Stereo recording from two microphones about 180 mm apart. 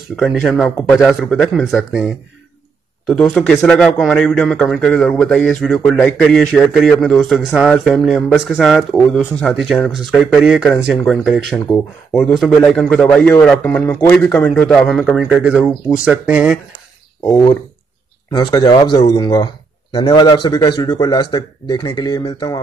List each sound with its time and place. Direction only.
0.2 s speech: centre (ahead or behind)
17.3 s a man's voice: 25° left (ahead or behind)